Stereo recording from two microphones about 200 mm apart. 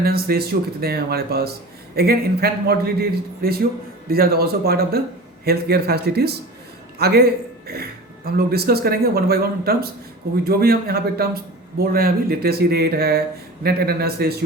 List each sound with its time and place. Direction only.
0.0 s speech: 50° right (ahead or behind)